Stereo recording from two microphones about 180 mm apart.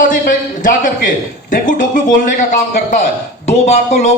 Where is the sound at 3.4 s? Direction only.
40° left (ahead or behind).